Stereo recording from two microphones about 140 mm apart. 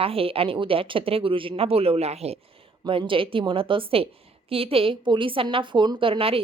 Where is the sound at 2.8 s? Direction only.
35° right (ahead or behind).